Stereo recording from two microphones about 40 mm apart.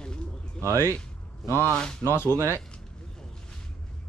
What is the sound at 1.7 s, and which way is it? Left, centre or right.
Speech, left.